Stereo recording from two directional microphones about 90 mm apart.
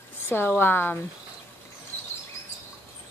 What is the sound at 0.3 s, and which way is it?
Speech, 25° left (ahead or behind).